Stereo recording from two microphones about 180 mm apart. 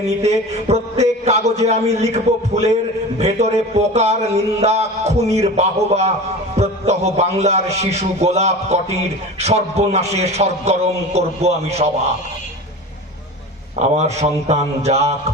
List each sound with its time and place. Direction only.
0.2 s a man's voice: 35° right (ahead or behind)
13.7 s a man's voice: 40° right (ahead or behind)